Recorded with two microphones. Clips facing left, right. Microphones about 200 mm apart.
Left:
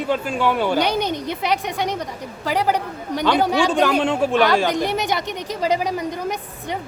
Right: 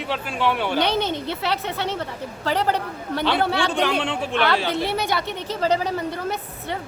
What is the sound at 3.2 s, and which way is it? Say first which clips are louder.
A man's voice: left 4 dB; 45° left (ahead or behind).